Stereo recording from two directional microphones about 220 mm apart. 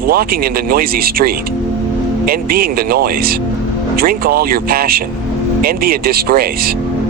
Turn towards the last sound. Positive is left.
turn(degrees=-45)  # may be behind; listen again after turning